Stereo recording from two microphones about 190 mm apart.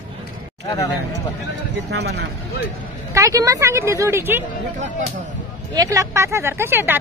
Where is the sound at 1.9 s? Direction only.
60° right (ahead or behind).